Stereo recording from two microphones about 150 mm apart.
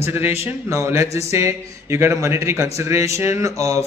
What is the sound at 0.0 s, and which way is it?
A man's voice, 15° right (ahead or behind).